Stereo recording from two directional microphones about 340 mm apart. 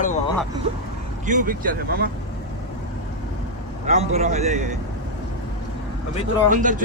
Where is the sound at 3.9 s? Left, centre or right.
Centre.